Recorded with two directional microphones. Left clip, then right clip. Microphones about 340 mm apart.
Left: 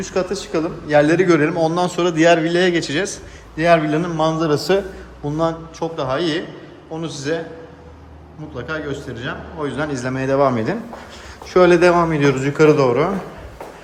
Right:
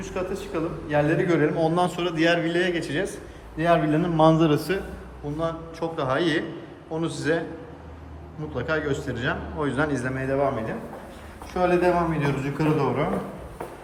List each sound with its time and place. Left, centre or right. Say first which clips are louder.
0.0 s a man's voice: left 8 dB; centre
5.4 s speech: left 7 dB; centre
6.0 s a man's voice: left 3 dB; centre
8.5 s a man's voice: even; centre
11.7 s a man's voice: left 8 dB; centre